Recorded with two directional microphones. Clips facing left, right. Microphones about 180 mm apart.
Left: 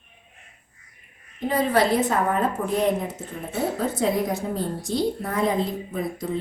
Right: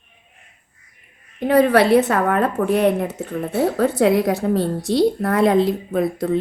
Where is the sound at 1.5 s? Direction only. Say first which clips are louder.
Right 7 dB; 65° right (ahead or behind).